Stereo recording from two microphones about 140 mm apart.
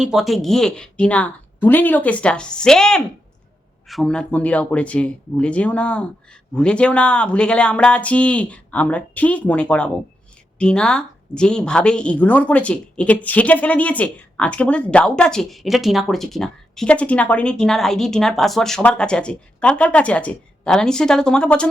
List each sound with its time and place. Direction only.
0.0 s a woman's voice: 5° right (ahead or behind)